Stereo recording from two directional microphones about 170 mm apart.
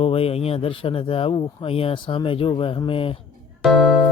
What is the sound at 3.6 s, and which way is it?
Music, 5° left (ahead or behind).